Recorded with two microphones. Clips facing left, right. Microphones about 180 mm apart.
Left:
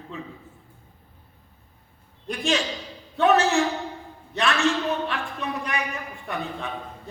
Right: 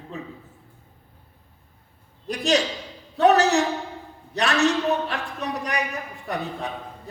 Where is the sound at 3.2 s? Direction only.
40° right (ahead or behind).